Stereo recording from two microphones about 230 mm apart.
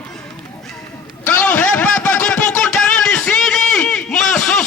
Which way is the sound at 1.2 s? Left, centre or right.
Centre.